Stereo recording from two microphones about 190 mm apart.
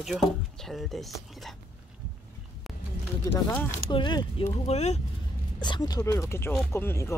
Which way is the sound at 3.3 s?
10° left (ahead or behind).